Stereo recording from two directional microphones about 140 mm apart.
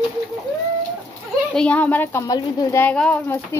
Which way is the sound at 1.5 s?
10° left (ahead or behind).